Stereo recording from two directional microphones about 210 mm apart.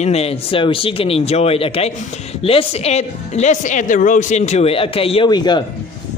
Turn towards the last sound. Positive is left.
turn(degrees=20)  # may be behind; listen again after turning